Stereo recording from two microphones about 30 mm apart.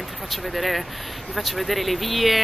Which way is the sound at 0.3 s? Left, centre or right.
Centre.